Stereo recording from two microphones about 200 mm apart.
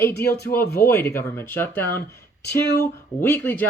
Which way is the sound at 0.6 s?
55° left (ahead or behind).